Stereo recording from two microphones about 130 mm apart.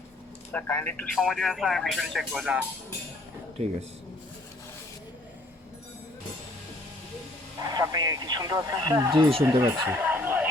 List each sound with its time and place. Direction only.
0.5 s speech: 15° left (ahead or behind)
1.2 s speech: centre (ahead or behind)
7.6 s speech: 30° right (ahead or behind)
9.8 s a sound: 10° right (ahead or behind)